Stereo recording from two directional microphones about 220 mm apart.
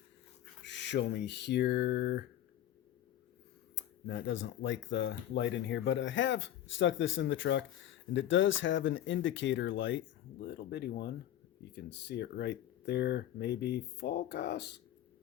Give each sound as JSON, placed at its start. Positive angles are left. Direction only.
{"t": 0.6, "sound": "speech", "side_deg": 55}
{"t": 3.8, "sound": "speech", "side_deg": 50}